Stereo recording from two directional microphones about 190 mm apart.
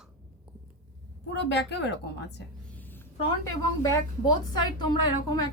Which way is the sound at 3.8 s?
20° left (ahead or behind).